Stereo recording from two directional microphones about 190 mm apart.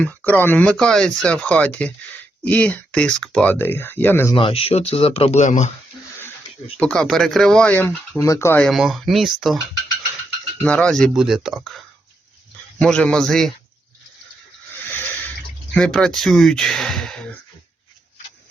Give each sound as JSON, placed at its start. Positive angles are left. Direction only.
{"t": 0.0, "sound": "speech", "side_deg": 10}
{"t": 4.4, "sound": "speech", "side_deg": 30}
{"t": 6.7, "sound": "speech", "side_deg": 5}
{"t": 8.6, "sound": "speech", "side_deg": 0}
{"t": 10.6, "sound": "speech", "side_deg": 5}
{"t": 12.8, "sound": "speech", "side_deg": 5}
{"t": 15.7, "sound": "speech", "side_deg": 5}